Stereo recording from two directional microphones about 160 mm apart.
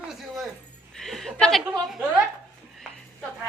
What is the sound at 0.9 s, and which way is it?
A woman's voice, centre (ahead or behind).